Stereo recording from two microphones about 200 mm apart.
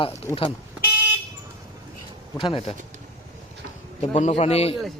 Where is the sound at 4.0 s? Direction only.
35° left (ahead or behind).